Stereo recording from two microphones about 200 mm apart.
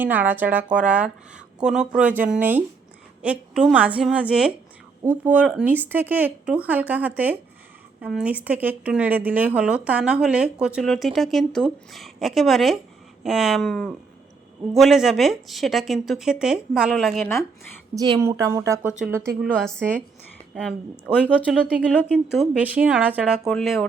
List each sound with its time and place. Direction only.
0.0 s speech: 10° right (ahead or behind)
17.9 s speech: 20° right (ahead or behind)
18.9 s speech: 5° right (ahead or behind)